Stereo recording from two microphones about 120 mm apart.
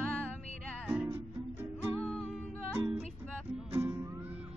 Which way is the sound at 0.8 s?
10° right (ahead or behind).